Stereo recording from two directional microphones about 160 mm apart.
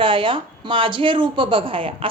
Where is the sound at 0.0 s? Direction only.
30° right (ahead or behind).